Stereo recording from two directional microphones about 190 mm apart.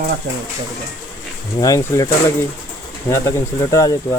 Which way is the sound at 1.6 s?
15° left (ahead or behind).